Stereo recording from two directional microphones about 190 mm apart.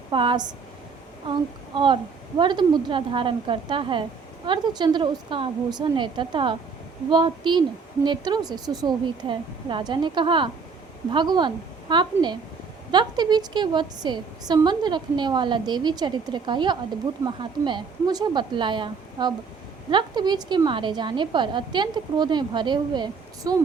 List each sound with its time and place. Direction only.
0.1 s a woman's voice: 25° right (ahead or behind)